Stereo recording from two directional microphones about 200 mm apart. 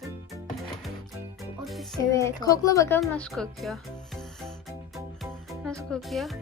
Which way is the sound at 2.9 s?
5° left (ahead or behind).